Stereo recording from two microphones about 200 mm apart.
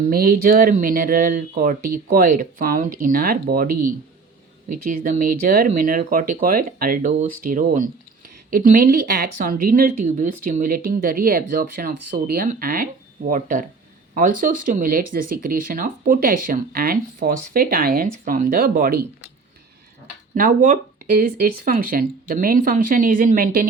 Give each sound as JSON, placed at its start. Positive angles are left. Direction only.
{"t": 0.0, "sound": "speech", "side_deg": -50}
{"t": 4.7, "sound": "speech", "side_deg": -45}
{"t": 20.3, "sound": "speech", "side_deg": -45}